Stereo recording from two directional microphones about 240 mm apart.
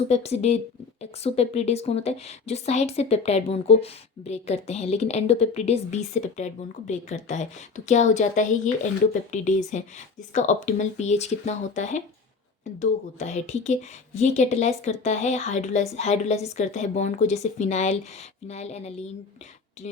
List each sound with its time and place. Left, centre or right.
0.1 s a woman's voice: left